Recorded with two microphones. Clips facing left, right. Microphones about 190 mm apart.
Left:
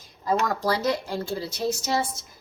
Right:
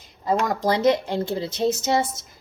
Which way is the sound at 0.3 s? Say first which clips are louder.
Right 2 dB; 20° right (ahead or behind).